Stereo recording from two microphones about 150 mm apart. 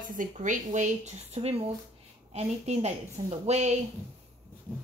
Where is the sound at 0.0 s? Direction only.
60° right (ahead or behind).